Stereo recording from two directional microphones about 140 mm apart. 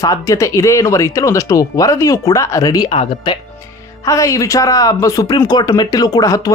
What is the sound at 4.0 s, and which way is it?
Speech, 25° left (ahead or behind).